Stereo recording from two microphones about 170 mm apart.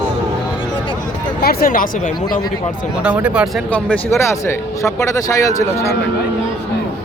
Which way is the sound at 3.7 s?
15° left (ahead or behind).